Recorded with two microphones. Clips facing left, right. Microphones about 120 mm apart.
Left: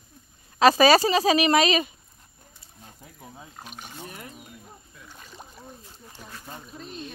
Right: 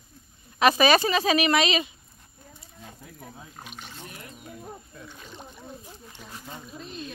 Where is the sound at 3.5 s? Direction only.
5° left (ahead or behind).